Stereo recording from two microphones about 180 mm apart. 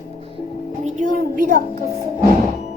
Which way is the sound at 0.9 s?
50° right (ahead or behind).